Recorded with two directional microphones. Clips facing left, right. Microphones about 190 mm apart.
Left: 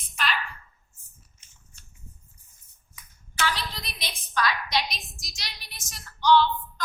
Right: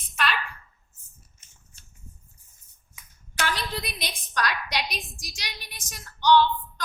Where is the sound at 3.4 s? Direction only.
50° right (ahead or behind).